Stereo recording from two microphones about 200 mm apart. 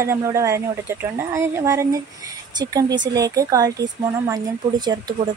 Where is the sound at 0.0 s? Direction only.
15° right (ahead or behind).